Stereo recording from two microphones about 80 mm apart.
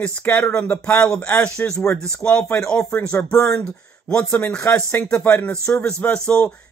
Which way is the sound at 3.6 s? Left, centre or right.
Centre.